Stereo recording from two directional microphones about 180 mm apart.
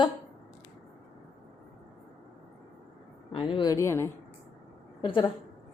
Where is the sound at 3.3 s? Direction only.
25° left (ahead or behind).